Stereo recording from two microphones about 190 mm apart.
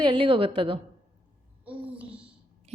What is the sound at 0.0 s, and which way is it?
Speech, 25° right (ahead or behind).